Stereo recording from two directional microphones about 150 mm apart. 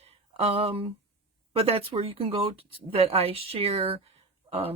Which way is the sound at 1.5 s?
40° right (ahead or behind).